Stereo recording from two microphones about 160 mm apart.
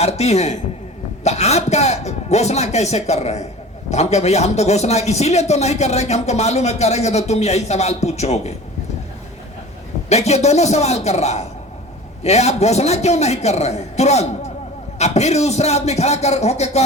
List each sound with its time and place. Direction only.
0.0 s a man's voice: 40° left (ahead or behind)
10.1 s a man's voice: 45° left (ahead or behind)